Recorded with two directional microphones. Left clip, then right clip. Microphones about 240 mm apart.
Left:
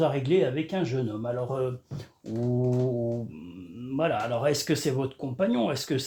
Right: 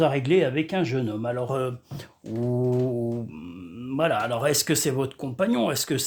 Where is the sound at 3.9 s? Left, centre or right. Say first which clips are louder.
Right 3 dB; right.